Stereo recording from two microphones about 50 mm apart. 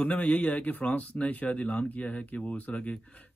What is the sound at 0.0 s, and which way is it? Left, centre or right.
Speech, left.